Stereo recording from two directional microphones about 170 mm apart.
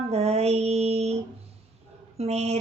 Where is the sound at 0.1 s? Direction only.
40° right (ahead or behind).